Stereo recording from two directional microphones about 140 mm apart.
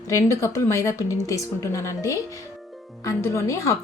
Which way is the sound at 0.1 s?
20° left (ahead or behind).